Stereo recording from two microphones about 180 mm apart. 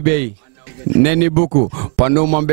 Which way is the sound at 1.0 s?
5° right (ahead or behind).